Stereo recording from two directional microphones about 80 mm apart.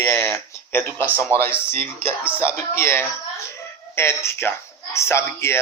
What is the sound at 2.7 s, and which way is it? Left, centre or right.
Speech, left.